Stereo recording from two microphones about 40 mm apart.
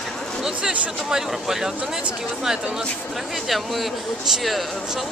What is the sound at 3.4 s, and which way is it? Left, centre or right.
Speech, centre.